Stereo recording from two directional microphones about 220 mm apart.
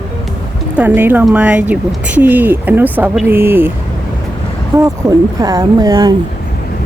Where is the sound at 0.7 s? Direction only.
10° right (ahead or behind).